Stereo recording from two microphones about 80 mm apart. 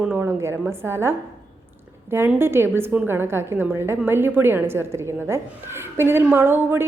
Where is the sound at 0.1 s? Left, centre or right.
Right.